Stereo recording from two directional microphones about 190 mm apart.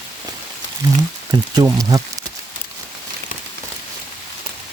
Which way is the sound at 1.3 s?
20° right (ahead or behind).